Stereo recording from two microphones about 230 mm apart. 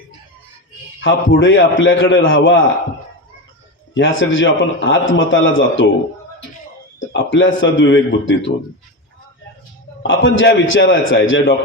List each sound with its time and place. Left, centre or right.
1.0 s a man's voice: left
3.9 s a man's voice: left
7.1 s a man's voice: left
10.1 s a man's voice: left